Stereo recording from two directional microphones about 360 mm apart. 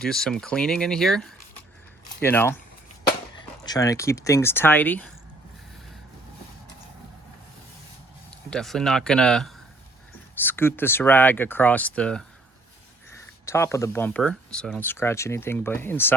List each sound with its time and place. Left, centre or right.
0.0 s speech: centre
3.7 s speech: centre
8.3 s speech: centre
13.4 s speech: centre